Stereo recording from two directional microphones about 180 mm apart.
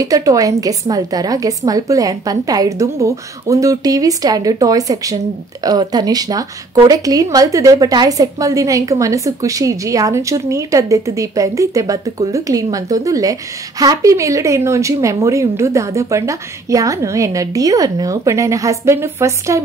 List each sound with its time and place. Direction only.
0.0 s a woman's voice: 20° right (ahead or behind)